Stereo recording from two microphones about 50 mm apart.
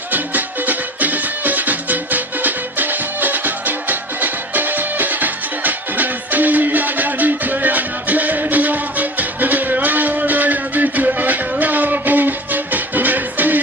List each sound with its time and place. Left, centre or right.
0.1 s music: right